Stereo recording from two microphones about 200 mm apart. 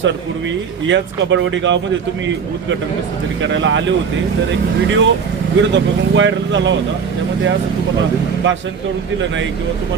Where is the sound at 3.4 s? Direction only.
65° right (ahead or behind).